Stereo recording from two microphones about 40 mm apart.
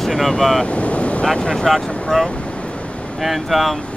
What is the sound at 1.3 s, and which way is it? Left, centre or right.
Speech, centre.